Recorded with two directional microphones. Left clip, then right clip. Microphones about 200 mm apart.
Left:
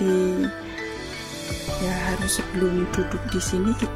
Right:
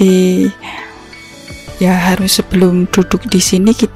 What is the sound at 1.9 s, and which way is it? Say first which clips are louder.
Speech: right 16 dB; 50° right (ahead or behind).